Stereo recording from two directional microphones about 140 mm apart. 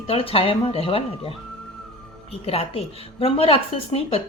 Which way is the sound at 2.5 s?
45° left (ahead or behind).